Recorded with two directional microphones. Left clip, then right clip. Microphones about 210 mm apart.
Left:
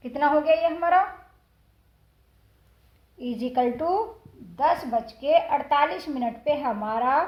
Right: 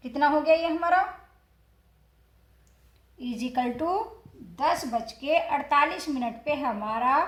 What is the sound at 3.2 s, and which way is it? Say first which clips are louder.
Speech: left 4 dB; 15° left (ahead or behind).